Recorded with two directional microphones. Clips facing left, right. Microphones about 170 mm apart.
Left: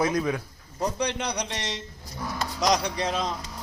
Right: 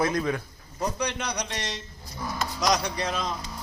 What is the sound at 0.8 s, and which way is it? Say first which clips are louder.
A man's voice: left 2 dB; 30° left (ahead or behind).